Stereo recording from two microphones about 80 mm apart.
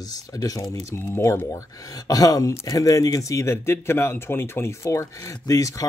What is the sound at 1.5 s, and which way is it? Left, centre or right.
Speech, left.